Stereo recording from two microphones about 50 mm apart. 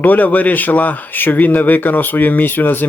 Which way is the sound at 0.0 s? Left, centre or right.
Left.